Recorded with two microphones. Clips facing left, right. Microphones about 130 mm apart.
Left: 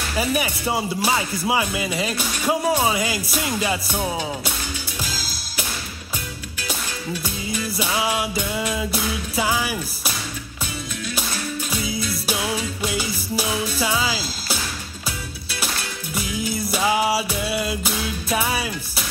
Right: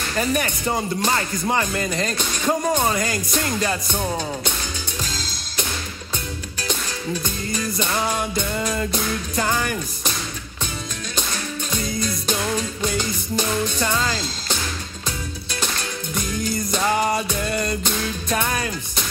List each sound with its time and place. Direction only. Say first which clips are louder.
0.1 s speech: even; 5° left (ahead or behind)
5.0 s music: even; 5° left (ahead or behind)
7.6 s speech: even; 5° left (ahead or behind)
11.7 s speech: right 3 dB; 5° left (ahead or behind)
16.2 s speech: even; 5° left (ahead or behind)